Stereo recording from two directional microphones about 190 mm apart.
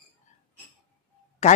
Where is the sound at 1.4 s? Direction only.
35° left (ahead or behind).